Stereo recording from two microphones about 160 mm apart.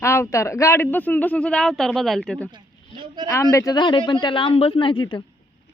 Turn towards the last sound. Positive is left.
turn(degrees=30)  # may be behind; listen again after turning